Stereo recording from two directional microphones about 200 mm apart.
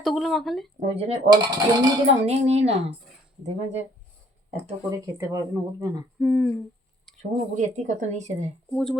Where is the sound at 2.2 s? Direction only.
35° right (ahead or behind).